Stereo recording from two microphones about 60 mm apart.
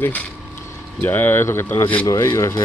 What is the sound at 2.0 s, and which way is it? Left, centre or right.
Speech, left.